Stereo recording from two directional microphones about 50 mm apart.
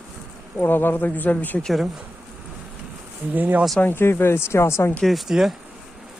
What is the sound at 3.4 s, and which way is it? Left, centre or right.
Speech, right.